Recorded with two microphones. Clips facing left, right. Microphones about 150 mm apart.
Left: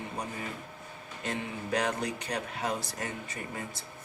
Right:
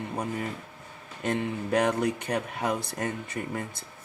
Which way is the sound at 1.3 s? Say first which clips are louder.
Right 6 dB; 55° right (ahead or behind).